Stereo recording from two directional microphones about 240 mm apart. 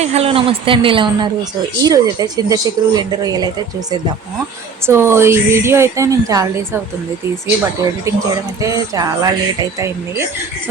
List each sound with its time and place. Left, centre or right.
0.0 s a woman's voice: right
4.9 s speech: centre
8.6 s speech: centre